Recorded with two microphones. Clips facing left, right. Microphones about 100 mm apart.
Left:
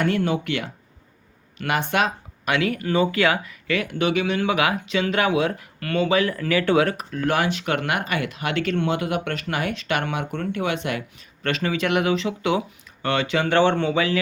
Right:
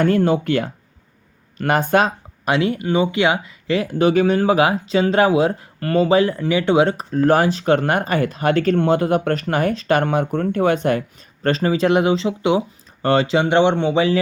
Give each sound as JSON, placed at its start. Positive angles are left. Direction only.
{"t": 0.0, "sound": "speech", "side_deg": -40}